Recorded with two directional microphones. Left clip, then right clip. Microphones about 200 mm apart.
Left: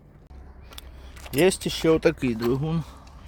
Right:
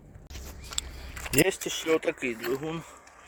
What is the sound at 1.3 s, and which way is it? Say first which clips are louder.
Speech: left 4 dB; 10° left (ahead or behind).